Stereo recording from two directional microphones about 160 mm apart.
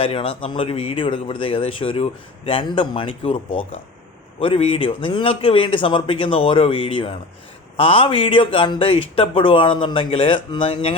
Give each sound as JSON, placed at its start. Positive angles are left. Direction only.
{"t": 0.0, "sound": "a man's voice", "side_deg": 35}